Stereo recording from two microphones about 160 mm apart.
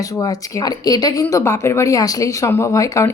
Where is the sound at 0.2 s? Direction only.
25° left (ahead or behind).